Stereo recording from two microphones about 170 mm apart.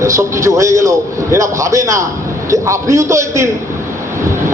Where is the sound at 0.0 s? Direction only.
15° right (ahead or behind).